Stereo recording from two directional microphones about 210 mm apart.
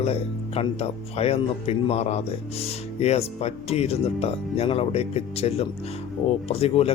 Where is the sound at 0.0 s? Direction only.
30° left (ahead or behind).